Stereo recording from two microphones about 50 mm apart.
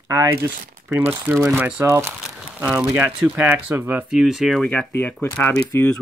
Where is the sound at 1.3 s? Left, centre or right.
Right.